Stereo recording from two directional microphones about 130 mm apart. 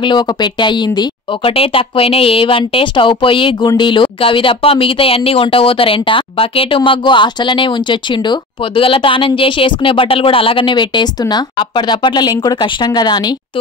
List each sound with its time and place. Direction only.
0.0 s speech: 35° left (ahead or behind)